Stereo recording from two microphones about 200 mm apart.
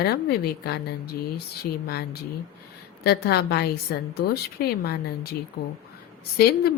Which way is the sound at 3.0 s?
55° left (ahead or behind).